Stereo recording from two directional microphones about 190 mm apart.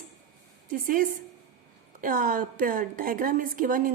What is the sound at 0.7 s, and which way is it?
A woman's voice, 45° right (ahead or behind).